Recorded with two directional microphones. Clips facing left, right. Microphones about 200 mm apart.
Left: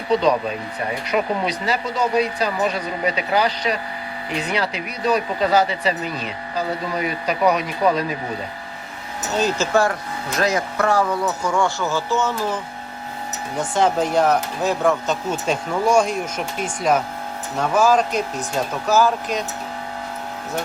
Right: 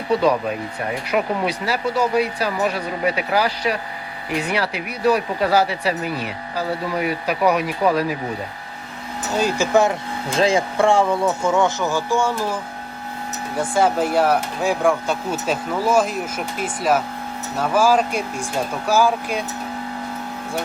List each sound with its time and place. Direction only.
0.1 s speech: 5° right (ahead or behind)
9.3 s speech: 10° right (ahead or behind)
13.6 s speech: 10° right (ahead or behind)